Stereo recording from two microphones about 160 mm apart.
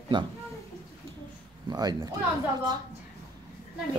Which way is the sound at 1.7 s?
25° right (ahead or behind).